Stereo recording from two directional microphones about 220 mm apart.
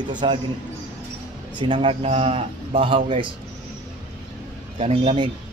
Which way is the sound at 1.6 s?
20° right (ahead or behind).